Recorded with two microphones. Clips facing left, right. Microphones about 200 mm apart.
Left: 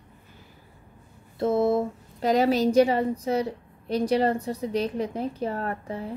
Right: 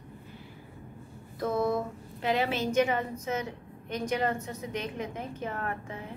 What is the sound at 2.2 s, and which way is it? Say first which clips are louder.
A woman's voice: left 7 dB; 40° left (ahead or behind).